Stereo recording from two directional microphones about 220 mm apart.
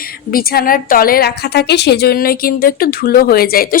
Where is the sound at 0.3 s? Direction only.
40° left (ahead or behind).